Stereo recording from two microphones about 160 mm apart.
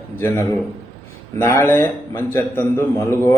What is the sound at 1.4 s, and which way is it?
A man's voice, 15° left (ahead or behind).